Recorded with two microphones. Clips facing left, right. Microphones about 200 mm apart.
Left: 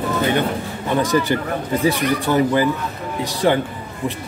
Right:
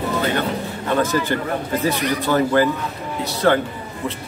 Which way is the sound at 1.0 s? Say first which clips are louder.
Left 3 dB; 15° left (ahead or behind).